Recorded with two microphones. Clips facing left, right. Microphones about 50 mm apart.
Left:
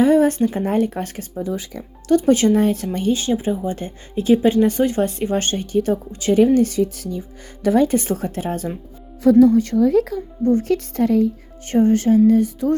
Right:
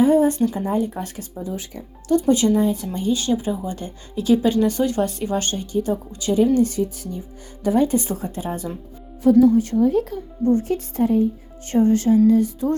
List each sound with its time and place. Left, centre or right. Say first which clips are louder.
0.0 s a sound: left 1 dB; left
0.5 s speech: left 3 dB; left
2.6 s speech: left 2 dB; left
3.2 s speech: left 2 dB; left
5.7 s speech: left 3 dB; left
7.6 s speech: left 2 dB; left
9.2 s speech: left 1 dB; left
9.7 s a woman's voice: left 2 dB; left
10.6 s speech: left 2 dB; left
11.7 s speech: left 1 dB; left